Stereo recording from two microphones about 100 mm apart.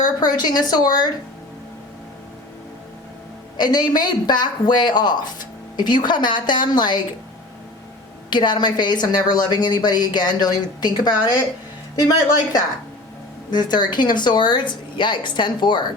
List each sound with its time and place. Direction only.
0.0 s a woman's voice: 40° left (ahead or behind)
3.6 s a woman's voice: 45° left (ahead or behind)
8.3 s a woman's voice: 50° left (ahead or behind)
13.5 s a woman's voice: 45° left (ahead or behind)